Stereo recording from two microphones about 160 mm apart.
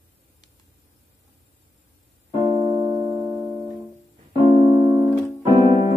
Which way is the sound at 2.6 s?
25° right (ahead or behind).